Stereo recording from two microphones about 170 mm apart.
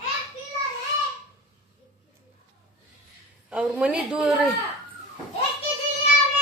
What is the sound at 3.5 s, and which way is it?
Speech, 5° right (ahead or behind).